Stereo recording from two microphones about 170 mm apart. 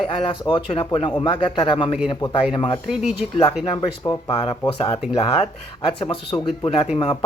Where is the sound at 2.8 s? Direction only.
5° right (ahead or behind).